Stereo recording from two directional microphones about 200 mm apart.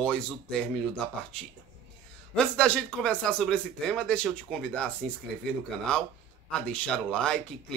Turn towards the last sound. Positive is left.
turn(degrees=5)  # may be behind; listen again after turning